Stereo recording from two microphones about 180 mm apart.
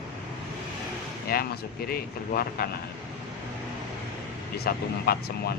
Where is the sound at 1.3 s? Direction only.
55° left (ahead or behind).